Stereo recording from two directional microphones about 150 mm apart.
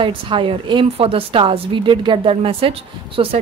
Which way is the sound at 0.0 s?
35° right (ahead or behind).